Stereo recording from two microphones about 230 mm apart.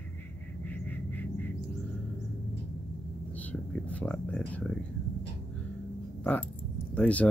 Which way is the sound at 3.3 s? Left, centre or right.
Centre.